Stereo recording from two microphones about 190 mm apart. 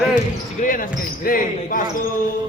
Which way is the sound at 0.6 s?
45° left (ahead or behind).